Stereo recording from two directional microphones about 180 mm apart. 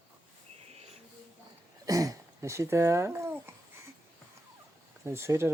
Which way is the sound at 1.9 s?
20° right (ahead or behind).